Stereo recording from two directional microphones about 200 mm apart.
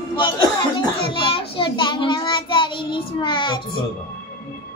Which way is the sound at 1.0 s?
25° left (ahead or behind).